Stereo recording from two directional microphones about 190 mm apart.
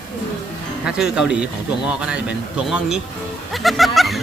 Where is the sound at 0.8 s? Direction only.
5° right (ahead or behind).